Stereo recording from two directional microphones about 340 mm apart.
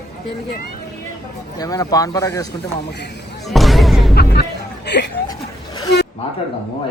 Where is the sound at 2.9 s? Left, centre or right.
Left.